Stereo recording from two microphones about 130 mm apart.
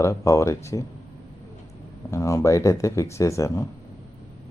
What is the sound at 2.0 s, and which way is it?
Speech, 25° left (ahead or behind).